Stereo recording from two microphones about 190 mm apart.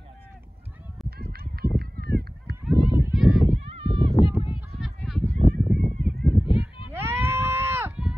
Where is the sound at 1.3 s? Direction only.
55° right (ahead or behind).